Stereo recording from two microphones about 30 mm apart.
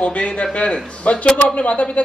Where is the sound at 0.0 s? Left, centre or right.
Left.